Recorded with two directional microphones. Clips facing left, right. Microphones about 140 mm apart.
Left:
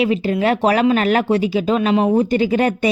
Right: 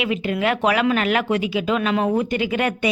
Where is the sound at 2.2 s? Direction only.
35° left (ahead or behind).